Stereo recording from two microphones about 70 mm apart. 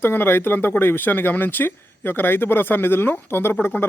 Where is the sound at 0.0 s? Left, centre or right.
Left.